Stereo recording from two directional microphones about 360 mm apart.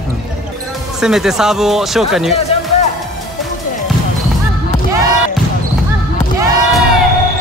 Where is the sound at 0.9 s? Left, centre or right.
Centre.